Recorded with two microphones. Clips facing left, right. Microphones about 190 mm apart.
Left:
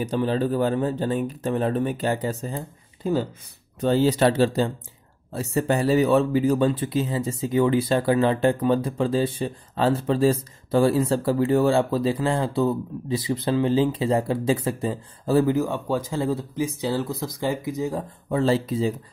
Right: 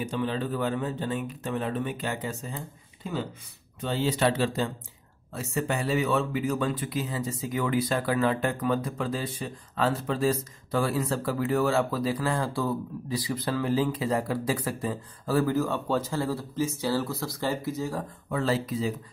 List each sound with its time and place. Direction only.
0.0 s speech: 35° left (ahead or behind)